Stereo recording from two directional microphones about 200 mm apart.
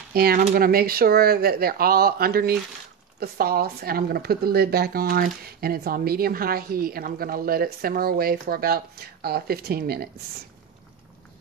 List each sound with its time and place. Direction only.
0.1 s speech: 50° right (ahead or behind)